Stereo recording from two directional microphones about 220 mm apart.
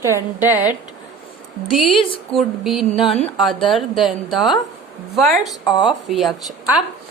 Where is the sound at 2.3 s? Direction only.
Centre (ahead or behind).